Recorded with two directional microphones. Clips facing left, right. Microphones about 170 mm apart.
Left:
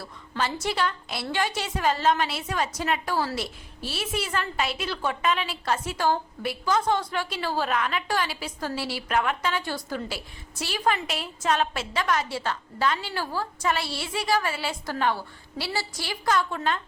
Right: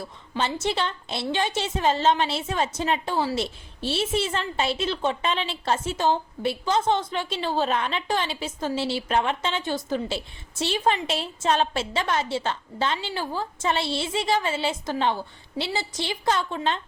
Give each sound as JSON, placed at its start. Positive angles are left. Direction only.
{"t": 0.0, "sound": "a woman's voice", "side_deg": -25}